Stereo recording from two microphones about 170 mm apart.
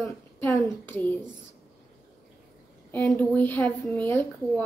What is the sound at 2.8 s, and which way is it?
Speech, 10° left (ahead or behind).